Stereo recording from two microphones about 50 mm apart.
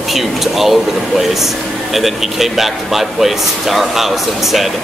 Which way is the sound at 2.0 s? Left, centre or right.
Centre.